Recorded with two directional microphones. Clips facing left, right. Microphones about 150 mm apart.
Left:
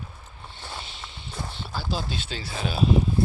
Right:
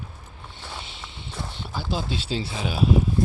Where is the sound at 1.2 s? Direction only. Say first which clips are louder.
Right 1 dB; 20° right (ahead or behind).